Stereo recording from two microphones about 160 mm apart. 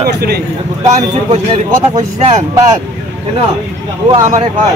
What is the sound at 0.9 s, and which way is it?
Speech, 45° right (ahead or behind).